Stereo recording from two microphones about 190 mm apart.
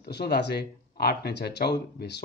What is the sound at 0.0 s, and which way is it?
Speech, 60° left (ahead or behind).